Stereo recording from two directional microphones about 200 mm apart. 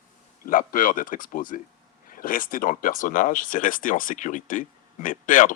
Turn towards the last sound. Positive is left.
turn(degrees=40)  # may be behind; listen again after turning